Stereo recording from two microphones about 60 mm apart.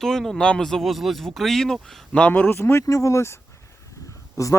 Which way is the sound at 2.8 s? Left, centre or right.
Left.